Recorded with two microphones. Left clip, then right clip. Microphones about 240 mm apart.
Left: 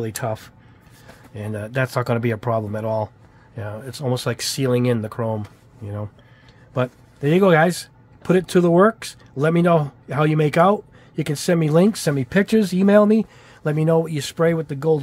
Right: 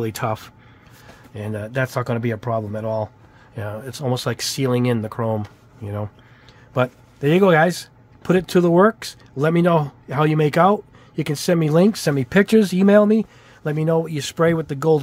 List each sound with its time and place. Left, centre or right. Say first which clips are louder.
0.0 s speech: right 2 dB; centre
1.3 s speech: even; centre
3.5 s speech: right 2 dB; centre